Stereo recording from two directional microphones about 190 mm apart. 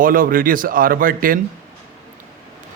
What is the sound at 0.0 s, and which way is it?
A man's voice, 45° right (ahead or behind).